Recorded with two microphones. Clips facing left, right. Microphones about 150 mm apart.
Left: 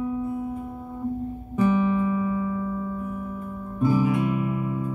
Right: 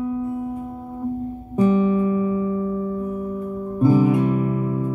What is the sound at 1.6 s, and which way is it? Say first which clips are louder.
Music: right 4 dB; 35° right (ahead or behind).